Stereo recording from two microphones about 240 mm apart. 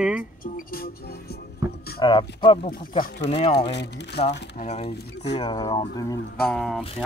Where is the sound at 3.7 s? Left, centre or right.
Left.